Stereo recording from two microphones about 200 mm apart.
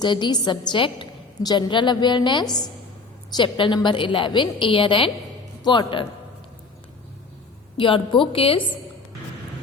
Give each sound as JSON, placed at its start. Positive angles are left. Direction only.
{"t": 0.0, "sound": "a woman's voice", "side_deg": 20}
{"t": 7.8, "sound": "a woman's voice", "side_deg": 25}